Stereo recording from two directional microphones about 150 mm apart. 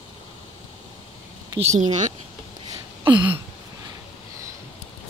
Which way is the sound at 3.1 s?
10° right (ahead or behind).